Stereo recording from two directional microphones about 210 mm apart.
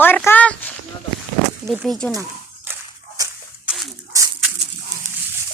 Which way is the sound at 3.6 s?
Centre (ahead or behind).